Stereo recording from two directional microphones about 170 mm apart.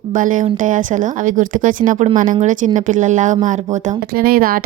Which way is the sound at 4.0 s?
65° right (ahead or behind).